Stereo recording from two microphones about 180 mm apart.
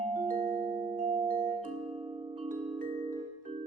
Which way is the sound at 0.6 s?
40° right (ahead or behind).